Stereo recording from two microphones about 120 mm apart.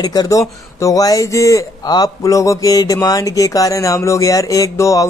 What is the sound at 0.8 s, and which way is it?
A man's voice, 30° left (ahead or behind).